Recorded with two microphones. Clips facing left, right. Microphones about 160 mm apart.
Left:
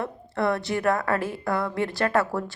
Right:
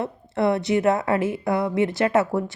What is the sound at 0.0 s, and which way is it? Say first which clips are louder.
A woman's voice: right 3 dB; 20° right (ahead or behind).